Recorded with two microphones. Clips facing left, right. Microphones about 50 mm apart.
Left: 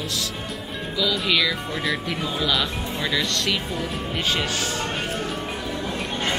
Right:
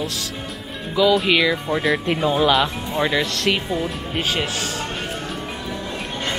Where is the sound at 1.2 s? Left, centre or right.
Right.